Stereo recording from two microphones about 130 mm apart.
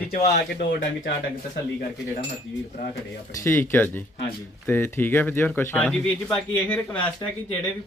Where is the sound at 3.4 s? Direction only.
20° left (ahead or behind).